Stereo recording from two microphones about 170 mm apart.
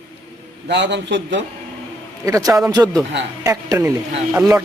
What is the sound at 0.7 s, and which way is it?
Speech, 90° right.